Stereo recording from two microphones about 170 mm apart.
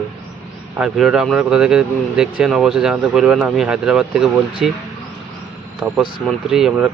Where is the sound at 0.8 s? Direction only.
5° right (ahead or behind).